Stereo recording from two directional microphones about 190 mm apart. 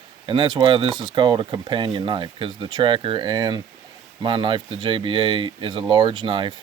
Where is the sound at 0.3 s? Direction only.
25° right (ahead or behind).